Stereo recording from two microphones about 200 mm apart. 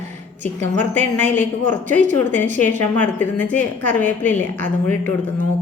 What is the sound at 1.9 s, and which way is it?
Speech, 40° right (ahead or behind).